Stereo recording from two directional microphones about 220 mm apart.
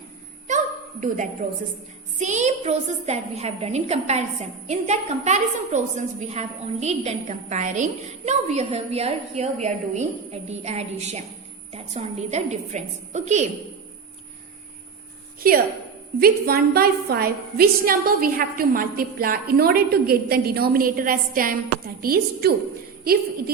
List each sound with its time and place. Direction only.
0.4 s a sound: 35° right (ahead or behind)
2.1 s a woman's voice: 30° right (ahead or behind)
15.4 s a woman's voice: 40° right (ahead or behind)